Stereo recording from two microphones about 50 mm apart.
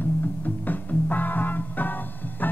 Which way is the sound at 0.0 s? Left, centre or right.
Left.